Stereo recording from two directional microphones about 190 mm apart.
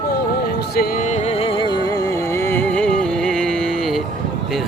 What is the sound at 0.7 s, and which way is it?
Music, 50° left (ahead or behind).